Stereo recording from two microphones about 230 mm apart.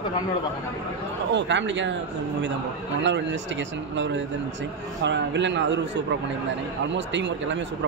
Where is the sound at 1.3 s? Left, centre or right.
Right.